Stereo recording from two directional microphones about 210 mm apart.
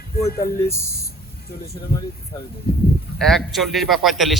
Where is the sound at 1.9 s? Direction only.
25° left (ahead or behind).